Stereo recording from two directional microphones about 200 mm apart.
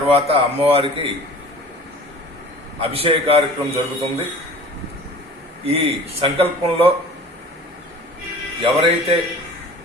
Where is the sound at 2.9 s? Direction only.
30° right (ahead or behind).